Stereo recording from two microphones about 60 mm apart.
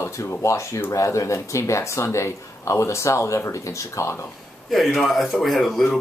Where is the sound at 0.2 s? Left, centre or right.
Left.